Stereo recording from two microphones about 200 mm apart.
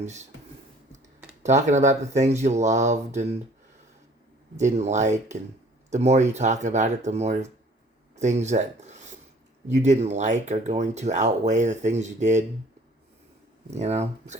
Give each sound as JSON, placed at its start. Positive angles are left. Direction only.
{"t": 1.4, "sound": "speech", "side_deg": -35}
{"t": 4.5, "sound": "speech", "side_deg": -35}
{"t": 13.7, "sound": "speech", "side_deg": -35}